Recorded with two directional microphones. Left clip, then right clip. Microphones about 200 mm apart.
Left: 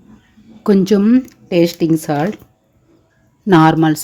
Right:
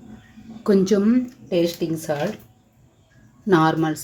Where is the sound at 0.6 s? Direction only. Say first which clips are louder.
Left 5 dB; 35° left (ahead or behind).